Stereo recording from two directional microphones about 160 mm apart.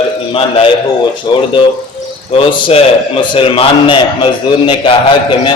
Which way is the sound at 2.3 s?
35° left (ahead or behind).